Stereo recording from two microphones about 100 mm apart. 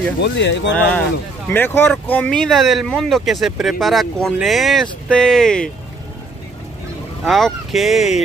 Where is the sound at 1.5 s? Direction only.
20° left (ahead or behind).